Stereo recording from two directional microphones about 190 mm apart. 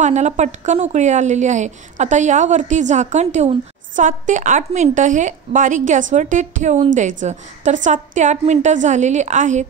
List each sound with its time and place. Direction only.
0.0 s a woman's voice: 35° right (ahead or behind)